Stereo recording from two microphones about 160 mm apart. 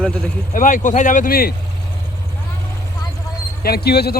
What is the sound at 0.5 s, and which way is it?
Speech, 55° left (ahead or behind).